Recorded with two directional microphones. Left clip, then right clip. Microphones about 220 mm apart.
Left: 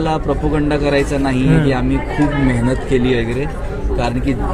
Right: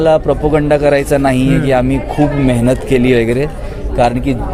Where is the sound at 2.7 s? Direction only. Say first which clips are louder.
Right 7 dB; 50° right (ahead or behind).